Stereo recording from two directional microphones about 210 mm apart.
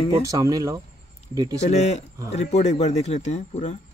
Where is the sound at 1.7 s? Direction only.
30° left (ahead or behind).